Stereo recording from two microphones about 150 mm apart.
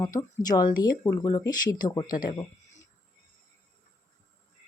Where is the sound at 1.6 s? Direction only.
65° left (ahead or behind).